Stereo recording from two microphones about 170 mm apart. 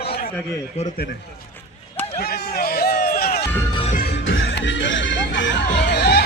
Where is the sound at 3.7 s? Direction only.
30° left (ahead or behind).